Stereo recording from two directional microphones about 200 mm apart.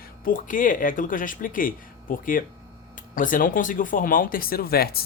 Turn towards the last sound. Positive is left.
turn(degrees=50)  # may be behind; listen again after turning